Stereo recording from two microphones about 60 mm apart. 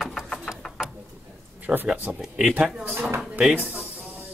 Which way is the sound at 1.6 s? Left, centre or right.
Right.